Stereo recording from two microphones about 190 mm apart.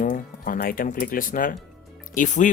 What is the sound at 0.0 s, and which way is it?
Speech, 45° left (ahead or behind).